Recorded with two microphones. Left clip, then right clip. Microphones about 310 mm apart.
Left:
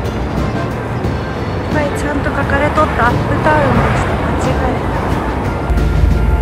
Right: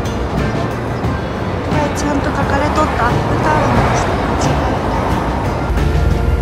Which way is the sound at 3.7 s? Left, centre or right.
Right.